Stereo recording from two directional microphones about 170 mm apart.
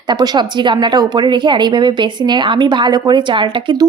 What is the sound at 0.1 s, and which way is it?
A woman's voice, 25° right (ahead or behind).